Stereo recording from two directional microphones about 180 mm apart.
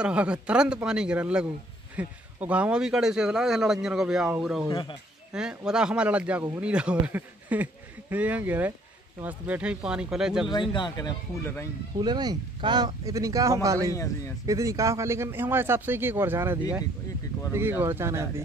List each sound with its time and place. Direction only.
0.0 s a man's voice: 5° right (ahead or behind)
4.6 s speech: 30° left (ahead or behind)
5.3 s a man's voice: 5° right (ahead or behind)
10.5 s speech: 25° left (ahead or behind)
11.4 s speech: 15° left (ahead or behind)
12.0 s speech: 20° right (ahead or behind)
13.9 s speech: 15° left (ahead or behind)
14.4 s speech: 20° right (ahead or behind)
17.6 s speech: 10° right (ahead or behind)